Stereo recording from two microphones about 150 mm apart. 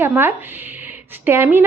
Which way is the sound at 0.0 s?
15° right (ahead or behind).